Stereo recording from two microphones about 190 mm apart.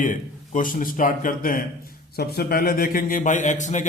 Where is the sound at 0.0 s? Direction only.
45° left (ahead or behind).